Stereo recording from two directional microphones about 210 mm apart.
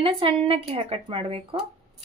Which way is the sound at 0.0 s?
25° right (ahead or behind).